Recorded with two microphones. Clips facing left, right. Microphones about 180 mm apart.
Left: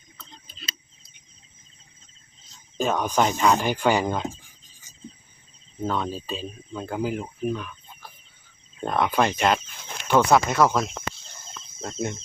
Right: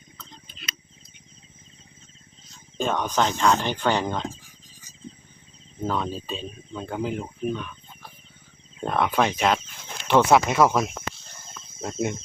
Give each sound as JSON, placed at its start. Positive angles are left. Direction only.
{"t": 0.4, "sound": "tick", "side_deg": 30}
{"t": 2.7, "sound": "speech", "side_deg": 5}
{"t": 5.8, "sound": "speech", "side_deg": 0}